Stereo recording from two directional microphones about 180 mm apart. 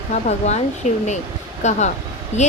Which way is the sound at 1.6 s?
40° left (ahead or behind).